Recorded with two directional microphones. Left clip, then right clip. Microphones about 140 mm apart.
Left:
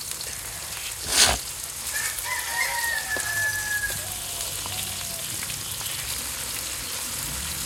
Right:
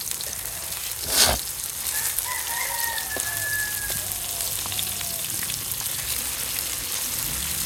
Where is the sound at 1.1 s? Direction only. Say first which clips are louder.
Left 1 dB; 90° right.